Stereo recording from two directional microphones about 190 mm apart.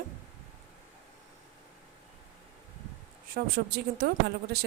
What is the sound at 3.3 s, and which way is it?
Speech, 55° right (ahead or behind).